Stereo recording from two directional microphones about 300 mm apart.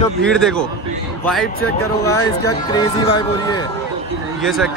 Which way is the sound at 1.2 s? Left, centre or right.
Centre.